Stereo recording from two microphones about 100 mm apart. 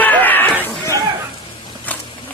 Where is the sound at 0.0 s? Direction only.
15° left (ahead or behind).